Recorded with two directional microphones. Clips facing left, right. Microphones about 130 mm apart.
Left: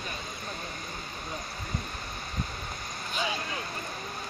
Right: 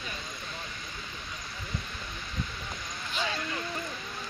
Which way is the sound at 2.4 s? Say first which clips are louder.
Even; 45° left (ahead or behind).